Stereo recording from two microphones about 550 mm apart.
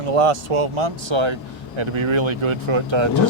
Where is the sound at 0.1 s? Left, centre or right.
Right.